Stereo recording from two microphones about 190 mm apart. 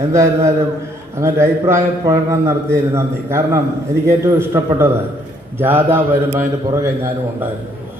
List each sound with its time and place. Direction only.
0.1 s a man's voice: 15° right (ahead or behind)